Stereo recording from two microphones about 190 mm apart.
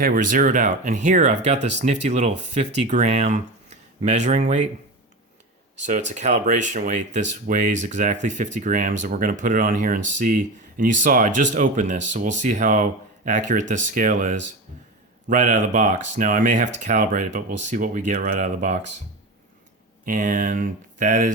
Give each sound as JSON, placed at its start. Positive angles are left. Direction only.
{"t": 0.0, "sound": "speech", "side_deg": -45}
{"t": 5.8, "sound": "speech", "side_deg": -40}
{"t": 20.1, "sound": "speech", "side_deg": -45}